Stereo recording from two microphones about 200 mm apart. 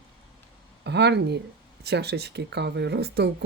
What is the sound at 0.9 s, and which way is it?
Speech, 55° right (ahead or behind).